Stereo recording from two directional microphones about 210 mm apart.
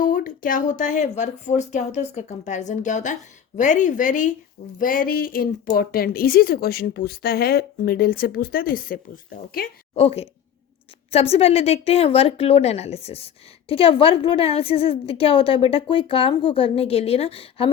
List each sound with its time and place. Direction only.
0.0 s speech: 40° left (ahead or behind)
9.9 s a woman's voice: 30° left (ahead or behind)